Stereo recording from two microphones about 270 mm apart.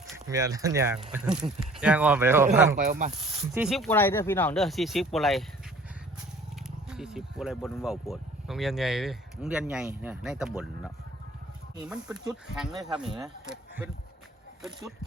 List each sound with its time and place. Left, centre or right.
0.3 s speech: centre
2.7 s speech: right
3.1 s speech: centre
6.9 s speech: centre